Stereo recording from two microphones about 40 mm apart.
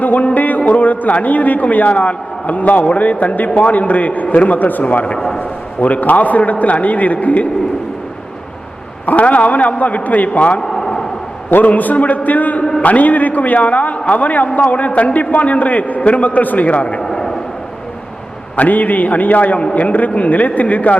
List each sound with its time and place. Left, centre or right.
0.0 s music: left
0.7 s a man's voice: left
5.1 s a man's voice: centre
5.4 s a man's voice: left
9.0 s a man's voice: left
10.6 s a sound: centre
11.5 s a man's voice: left
17.0 s a sound: centre
18.5 s a man's voice: left